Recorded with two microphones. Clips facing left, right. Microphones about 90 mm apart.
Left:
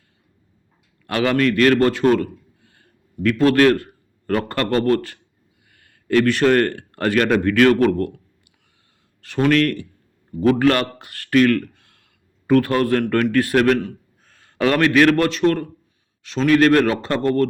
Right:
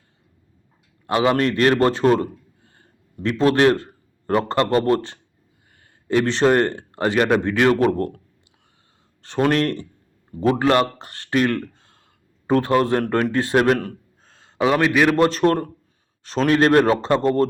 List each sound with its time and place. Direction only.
1.0 s speech: 25° right (ahead or behind)
7.9 s a man's voice: 35° right (ahead or behind)
9.2 s speech: 30° right (ahead or behind)
14.3 s a sound: 25° right (ahead or behind)
14.6 s a man's voice: 10° right (ahead or behind)
15.3 s a man's voice: 40° right (ahead or behind)